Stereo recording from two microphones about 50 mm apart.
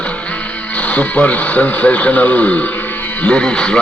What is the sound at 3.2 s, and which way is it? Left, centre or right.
Speech, centre.